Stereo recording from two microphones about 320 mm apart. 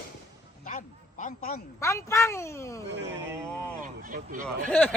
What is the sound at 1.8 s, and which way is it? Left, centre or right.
Speech, centre.